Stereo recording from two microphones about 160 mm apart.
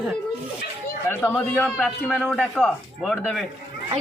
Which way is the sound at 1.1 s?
15° left (ahead or behind).